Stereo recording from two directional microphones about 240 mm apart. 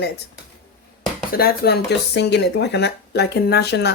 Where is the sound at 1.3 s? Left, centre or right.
Left.